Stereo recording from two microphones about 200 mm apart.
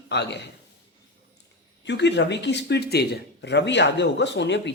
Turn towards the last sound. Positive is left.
turn(degrees=60)  # may be behind; listen again after turning